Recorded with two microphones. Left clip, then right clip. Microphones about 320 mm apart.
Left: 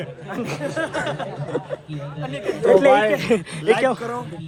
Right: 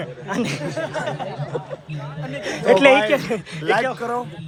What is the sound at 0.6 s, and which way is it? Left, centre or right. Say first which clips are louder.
Speech: left 1 dB; left.